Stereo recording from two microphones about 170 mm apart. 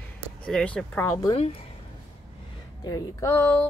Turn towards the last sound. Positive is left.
turn(degrees=15)  # may be behind; listen again after turning